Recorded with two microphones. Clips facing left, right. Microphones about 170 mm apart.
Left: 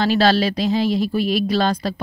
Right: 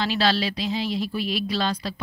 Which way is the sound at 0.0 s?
45° left (ahead or behind).